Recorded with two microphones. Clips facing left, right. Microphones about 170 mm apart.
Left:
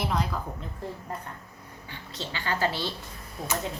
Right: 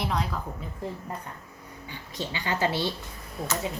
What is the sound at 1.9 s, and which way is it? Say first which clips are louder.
A woman's voice: right 3 dB; 15° right (ahead or behind).